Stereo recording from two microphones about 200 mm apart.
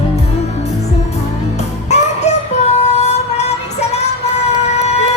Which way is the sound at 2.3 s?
35° left (ahead or behind).